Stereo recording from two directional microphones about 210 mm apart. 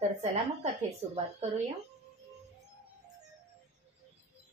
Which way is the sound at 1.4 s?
30° right (ahead or behind).